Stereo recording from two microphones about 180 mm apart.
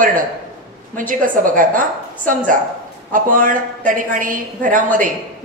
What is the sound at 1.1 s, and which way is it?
Speech, 50° right (ahead or behind).